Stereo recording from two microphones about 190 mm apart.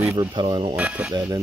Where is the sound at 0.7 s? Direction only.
5° right (ahead or behind).